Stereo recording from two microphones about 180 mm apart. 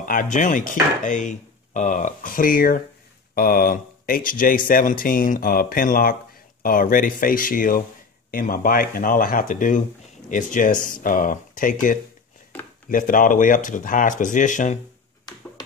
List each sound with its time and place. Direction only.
0.0 s chopping: 50° left (ahead or behind)